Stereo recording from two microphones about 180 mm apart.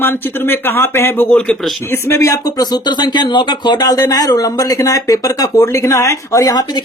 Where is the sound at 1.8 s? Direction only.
15° left (ahead or behind).